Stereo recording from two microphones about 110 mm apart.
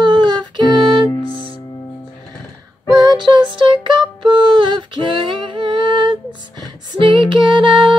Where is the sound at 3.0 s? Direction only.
40° right (ahead or behind).